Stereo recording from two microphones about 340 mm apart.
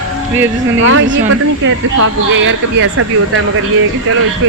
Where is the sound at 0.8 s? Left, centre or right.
Right.